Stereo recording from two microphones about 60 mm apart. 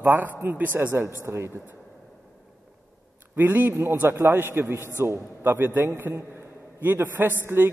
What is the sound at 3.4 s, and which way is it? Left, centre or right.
Speech, right.